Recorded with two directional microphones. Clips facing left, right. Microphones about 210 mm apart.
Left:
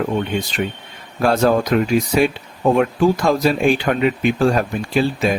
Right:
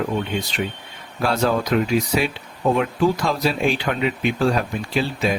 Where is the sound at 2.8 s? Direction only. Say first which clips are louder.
Left 4 dB; 50° left (ahead or behind).